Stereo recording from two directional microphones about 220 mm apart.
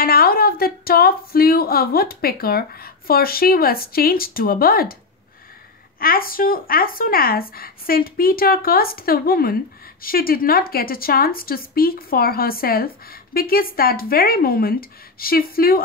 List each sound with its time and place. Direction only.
0.0 s speech: 40° left (ahead or behind)
5.9 s speech: 40° left (ahead or behind)